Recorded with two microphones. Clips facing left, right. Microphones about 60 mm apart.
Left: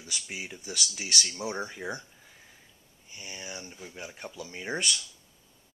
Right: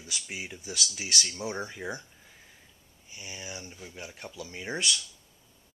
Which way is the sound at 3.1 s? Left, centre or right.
Centre.